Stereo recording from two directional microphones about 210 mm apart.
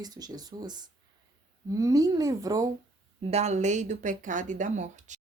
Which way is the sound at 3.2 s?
30° right (ahead or behind).